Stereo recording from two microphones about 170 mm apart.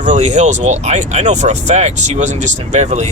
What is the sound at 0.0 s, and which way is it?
Speech, 45° right (ahead or behind).